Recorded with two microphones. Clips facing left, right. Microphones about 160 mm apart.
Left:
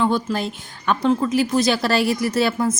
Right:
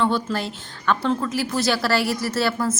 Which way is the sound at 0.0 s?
15° left (ahead or behind).